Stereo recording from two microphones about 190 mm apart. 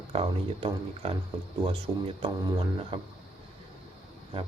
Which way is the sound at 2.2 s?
30° right (ahead or behind).